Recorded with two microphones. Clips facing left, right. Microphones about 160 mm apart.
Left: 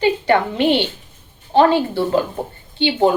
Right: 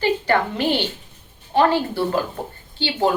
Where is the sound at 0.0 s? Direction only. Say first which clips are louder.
Left 3 dB; 25° left (ahead or behind).